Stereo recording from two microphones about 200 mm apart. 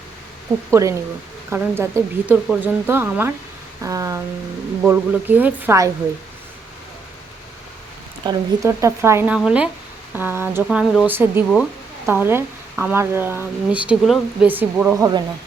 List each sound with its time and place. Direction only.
0.7 s speech: 15° right (ahead or behind)
8.2 s speech: 20° right (ahead or behind)